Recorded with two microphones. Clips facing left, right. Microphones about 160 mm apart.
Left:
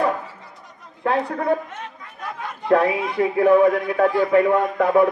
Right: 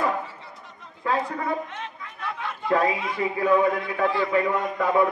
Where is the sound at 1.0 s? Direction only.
65° left (ahead or behind).